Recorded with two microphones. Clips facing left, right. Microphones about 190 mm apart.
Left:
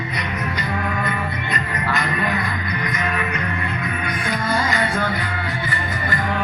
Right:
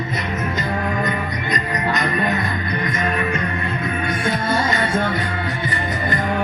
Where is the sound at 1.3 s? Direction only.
40° right (ahead or behind).